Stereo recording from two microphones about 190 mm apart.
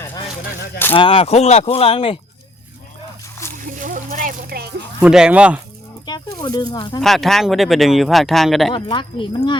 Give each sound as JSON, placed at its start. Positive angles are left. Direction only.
{"t": 0.9, "sound": "speech", "side_deg": 30}
{"t": 3.6, "sound": "splash", "side_deg": -45}
{"t": 4.9, "sound": "speech", "side_deg": -5}
{"t": 6.3, "sound": "speech", "side_deg": 25}
{"t": 7.0, "sound": "speech", "side_deg": 0}
{"t": 8.7, "sound": "speech", "side_deg": 25}